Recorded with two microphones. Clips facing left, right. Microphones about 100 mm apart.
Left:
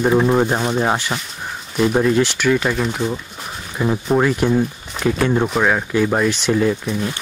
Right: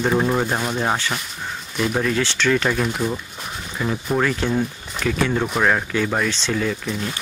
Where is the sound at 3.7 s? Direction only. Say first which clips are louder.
Left 5 dB; 20° left (ahead or behind).